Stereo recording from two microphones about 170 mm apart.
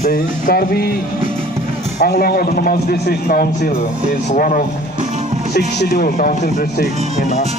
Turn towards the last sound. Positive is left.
turn(degrees=50)  # may be behind; listen again after turning